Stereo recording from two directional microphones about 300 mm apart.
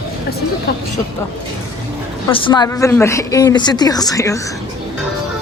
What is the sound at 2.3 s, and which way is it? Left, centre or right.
A woman's voice, centre.